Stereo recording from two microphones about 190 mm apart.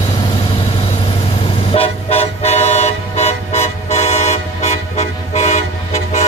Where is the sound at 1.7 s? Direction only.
30° left (ahead or behind).